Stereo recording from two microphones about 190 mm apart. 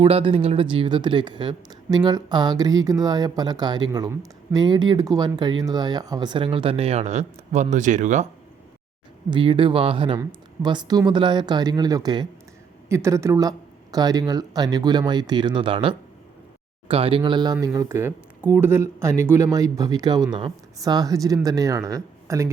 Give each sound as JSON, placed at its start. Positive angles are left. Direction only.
{"t": 0.0, "sound": "speech", "side_deg": -30}
{"t": 9.3, "sound": "speech", "side_deg": -25}